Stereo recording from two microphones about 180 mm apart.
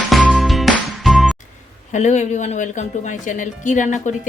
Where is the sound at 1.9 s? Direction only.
40° left (ahead or behind).